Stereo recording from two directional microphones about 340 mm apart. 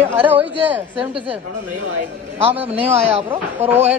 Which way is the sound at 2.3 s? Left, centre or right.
Centre.